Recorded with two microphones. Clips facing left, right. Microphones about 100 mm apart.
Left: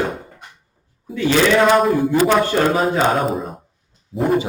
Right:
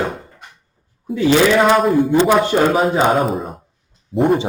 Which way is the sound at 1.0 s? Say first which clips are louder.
Right 3 dB; 10° right (ahead or behind).